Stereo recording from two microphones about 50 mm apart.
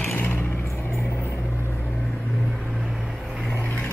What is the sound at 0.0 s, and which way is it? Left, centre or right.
Vehicle, left.